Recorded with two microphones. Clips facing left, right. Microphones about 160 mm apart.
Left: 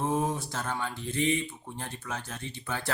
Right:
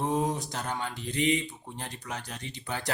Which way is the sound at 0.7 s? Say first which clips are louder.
Left 1 dB; 20° right (ahead or behind).